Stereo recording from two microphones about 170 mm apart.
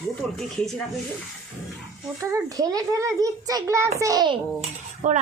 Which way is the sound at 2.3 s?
20° right (ahead or behind).